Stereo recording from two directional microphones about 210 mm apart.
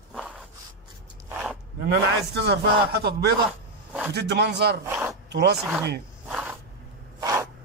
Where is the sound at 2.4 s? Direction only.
50° right (ahead or behind).